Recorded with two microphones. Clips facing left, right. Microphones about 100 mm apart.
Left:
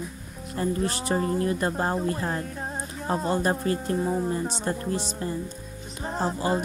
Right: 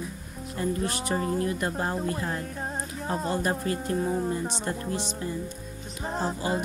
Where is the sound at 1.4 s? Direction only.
35° left (ahead or behind).